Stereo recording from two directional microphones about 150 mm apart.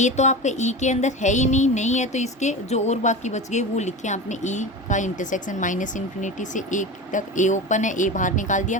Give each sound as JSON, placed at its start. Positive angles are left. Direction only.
{"t": 0.0, "sound": "music", "side_deg": 50}